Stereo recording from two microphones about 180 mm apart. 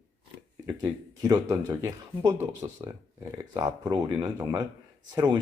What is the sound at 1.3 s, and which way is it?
Speech, 20° right (ahead or behind).